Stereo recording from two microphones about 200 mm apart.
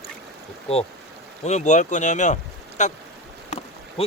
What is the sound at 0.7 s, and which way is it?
Speech, 30° left (ahead or behind).